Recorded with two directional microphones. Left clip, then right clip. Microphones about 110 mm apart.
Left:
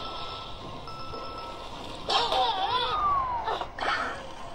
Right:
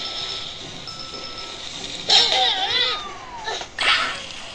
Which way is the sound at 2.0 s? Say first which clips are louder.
Right 8 dB; 35° left (ahead or behind).